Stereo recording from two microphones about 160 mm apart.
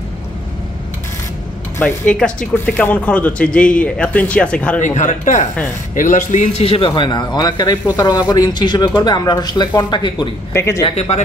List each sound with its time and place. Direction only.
1.8 s speech: 10° left (ahead or behind)
4.7 s a man's voice: 50° left (ahead or behind); by 10.3 s 30° left (ahead or behind)
10.5 s speech: 15° left (ahead or behind)
11.0 s speech: 40° left (ahead or behind)